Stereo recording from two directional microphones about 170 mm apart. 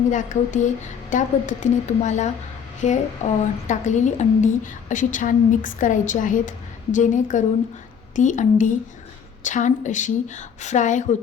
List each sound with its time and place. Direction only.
0.1 s a woman's voice: 45° left (ahead or behind)